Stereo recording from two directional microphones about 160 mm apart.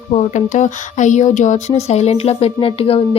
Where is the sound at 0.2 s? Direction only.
50° left (ahead or behind).